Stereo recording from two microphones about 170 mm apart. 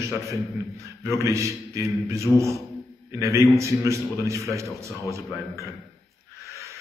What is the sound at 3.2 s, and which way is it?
A man's voice, 15° right (ahead or behind).